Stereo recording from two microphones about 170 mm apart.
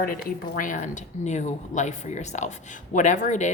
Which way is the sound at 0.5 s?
50° left (ahead or behind).